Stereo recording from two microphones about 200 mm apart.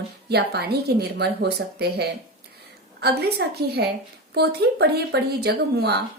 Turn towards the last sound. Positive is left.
turn(degrees=-55)  # may be behind; listen again after turning